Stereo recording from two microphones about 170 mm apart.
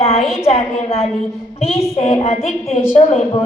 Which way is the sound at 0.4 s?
40° left (ahead or behind).